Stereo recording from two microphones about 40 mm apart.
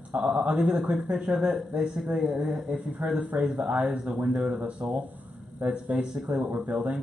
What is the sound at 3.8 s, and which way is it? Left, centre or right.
Speech, centre.